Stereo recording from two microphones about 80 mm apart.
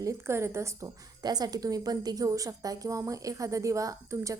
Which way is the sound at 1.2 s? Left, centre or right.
Right.